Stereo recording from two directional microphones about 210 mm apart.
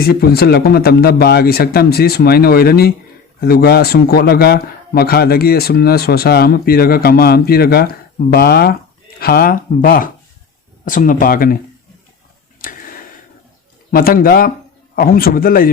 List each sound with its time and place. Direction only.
0.0 s speech: 45° left (ahead or behind)
12.6 s a sound: 40° left (ahead or behind)
13.9 s speech: 45° left (ahead or behind)